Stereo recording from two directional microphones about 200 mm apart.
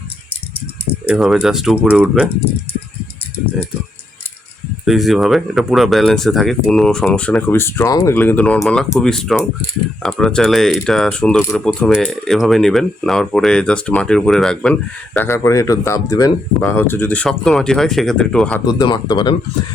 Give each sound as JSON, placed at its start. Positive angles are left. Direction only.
{"t": 1.0, "sound": "speech", "side_deg": -5}
{"t": 4.9, "sound": "speech", "side_deg": 0}
{"t": 18.6, "sound": "speech", "side_deg": 20}